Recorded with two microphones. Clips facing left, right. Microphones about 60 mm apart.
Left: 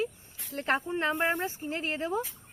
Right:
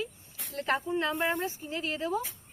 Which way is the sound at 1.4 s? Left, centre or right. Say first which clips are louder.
Left 1 dB; left.